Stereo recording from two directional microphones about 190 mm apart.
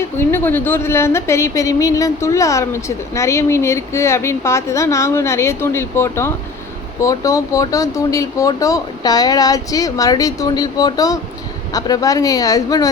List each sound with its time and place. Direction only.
0.2 s a woman's voice: 10° left (ahead or behind)